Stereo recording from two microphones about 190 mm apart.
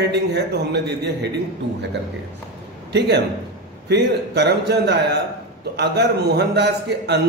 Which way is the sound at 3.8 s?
65° right (ahead or behind).